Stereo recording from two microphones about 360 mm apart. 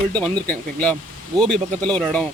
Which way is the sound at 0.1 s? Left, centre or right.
Centre.